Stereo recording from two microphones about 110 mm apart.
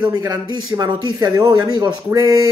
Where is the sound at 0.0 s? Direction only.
40° right (ahead or behind).